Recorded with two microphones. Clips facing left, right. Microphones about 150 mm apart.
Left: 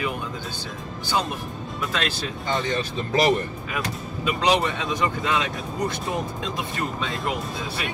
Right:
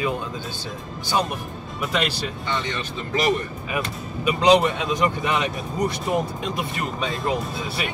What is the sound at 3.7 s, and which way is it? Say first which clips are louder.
Speech: right 2 dB; 20° right (ahead or behind).